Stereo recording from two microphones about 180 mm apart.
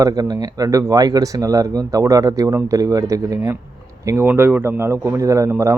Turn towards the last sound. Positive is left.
turn(degrees=-15)  # may be behind; listen again after turning